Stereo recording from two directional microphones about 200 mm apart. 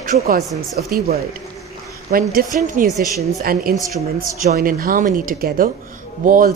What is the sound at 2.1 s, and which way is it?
A woman's voice, 45° right (ahead or behind).